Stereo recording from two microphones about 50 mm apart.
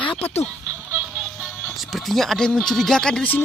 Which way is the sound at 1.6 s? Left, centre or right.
Centre.